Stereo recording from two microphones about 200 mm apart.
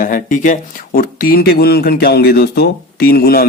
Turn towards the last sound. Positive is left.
turn(degrees=50)  # may be behind; listen again after turning